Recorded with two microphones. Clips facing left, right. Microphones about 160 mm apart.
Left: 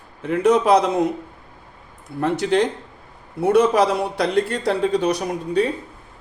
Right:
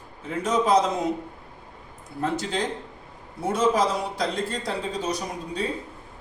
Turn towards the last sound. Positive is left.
turn(degrees=70)  # may be behind; listen again after turning